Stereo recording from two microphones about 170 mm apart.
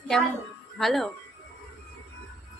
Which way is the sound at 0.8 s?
Centre (ahead or behind).